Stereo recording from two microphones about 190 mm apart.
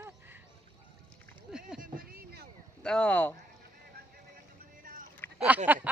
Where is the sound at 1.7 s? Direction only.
45° right (ahead or behind).